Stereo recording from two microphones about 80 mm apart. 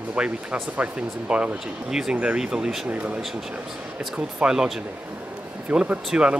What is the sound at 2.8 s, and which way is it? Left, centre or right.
Speech, centre.